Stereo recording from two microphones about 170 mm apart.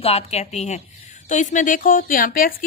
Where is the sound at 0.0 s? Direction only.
35° left (ahead or behind).